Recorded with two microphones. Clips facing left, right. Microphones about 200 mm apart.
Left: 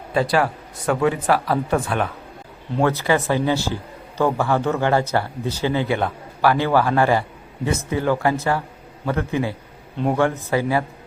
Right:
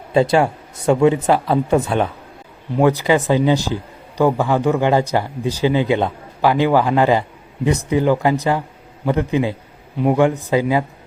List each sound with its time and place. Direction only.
0.1 s speech: 25° right (ahead or behind)